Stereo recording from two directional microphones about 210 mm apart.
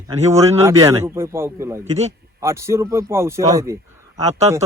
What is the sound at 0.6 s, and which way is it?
Speech, 15° right (ahead or behind).